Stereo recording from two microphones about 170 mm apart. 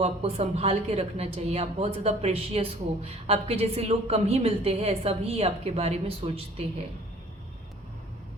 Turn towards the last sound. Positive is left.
turn(degrees=-35)  # may be behind; listen again after turning